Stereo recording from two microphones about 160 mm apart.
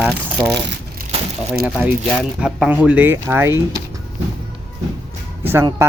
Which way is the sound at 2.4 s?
5° right (ahead or behind).